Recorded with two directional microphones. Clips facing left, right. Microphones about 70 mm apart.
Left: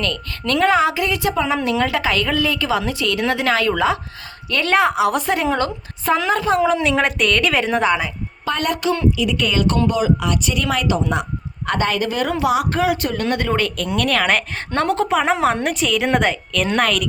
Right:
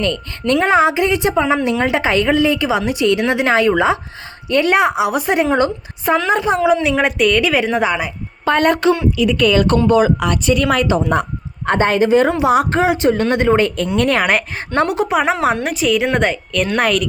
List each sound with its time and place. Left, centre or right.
0.0 s a woman's voice: right
6.8 s a woman's voice: centre
8.4 s a woman's voice: right
14.8 s a woman's voice: centre